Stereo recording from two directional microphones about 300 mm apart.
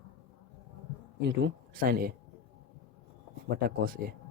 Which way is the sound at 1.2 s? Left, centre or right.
Right.